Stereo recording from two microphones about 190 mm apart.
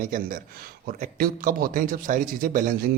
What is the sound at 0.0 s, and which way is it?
A man's voice, 45° right (ahead or behind).